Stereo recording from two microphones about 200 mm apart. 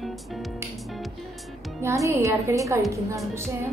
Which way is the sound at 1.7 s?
15° right (ahead or behind).